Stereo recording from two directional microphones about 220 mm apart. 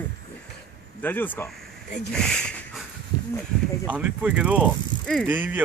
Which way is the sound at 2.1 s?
5° left (ahead or behind).